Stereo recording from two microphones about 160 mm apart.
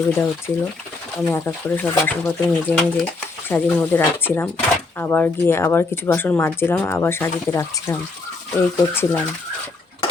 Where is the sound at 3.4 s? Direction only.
15° left (ahead or behind).